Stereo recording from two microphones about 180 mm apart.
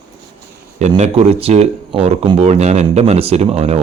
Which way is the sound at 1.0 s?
35° right (ahead or behind).